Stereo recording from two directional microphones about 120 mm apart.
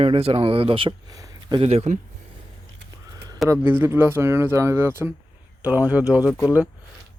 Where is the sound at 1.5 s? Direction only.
55° right (ahead or behind).